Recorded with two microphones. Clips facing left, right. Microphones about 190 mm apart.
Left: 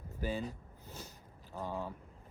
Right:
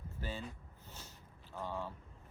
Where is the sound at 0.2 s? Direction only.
10° left (ahead or behind).